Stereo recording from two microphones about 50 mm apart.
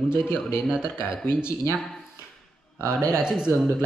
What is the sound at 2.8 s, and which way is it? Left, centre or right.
Speech, right.